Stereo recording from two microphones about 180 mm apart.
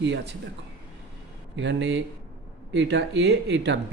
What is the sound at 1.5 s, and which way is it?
Speech, 80° right.